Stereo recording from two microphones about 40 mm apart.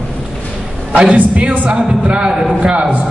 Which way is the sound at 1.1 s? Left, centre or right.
Right.